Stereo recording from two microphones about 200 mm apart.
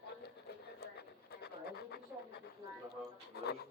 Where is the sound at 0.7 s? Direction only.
55° left (ahead or behind).